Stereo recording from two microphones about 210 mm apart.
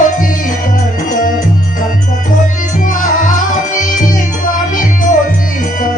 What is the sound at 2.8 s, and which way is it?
Music, 40° left (ahead or behind).